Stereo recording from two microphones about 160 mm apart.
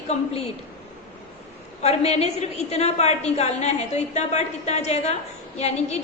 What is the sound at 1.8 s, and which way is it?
A woman's voice, 40° left (ahead or behind).